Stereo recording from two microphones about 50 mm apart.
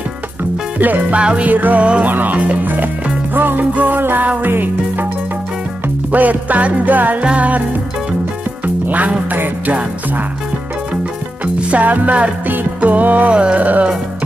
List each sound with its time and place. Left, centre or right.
0.7 s music: right
1.2 s music: right
1.5 s music: right
6.1 s music: right
8.8 s music: right
11.4 s music: right